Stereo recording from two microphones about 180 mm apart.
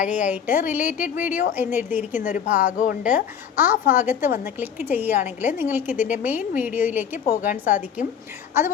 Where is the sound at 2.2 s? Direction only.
45° left (ahead or behind).